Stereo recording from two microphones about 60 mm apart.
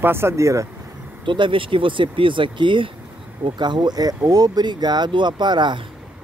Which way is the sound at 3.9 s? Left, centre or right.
Right.